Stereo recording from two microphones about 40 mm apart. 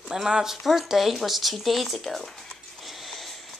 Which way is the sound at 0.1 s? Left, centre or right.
Centre.